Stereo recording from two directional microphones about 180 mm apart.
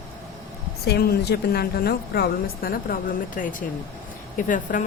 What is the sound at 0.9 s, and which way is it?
A woman's voice, 65° left (ahead or behind).